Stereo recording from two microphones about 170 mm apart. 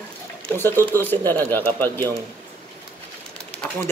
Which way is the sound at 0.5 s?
15° left (ahead or behind).